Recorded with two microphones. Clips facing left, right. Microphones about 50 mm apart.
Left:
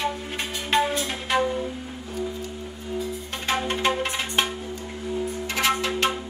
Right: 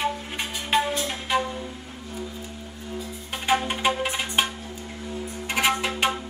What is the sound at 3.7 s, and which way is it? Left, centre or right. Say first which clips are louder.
Music: even; centre.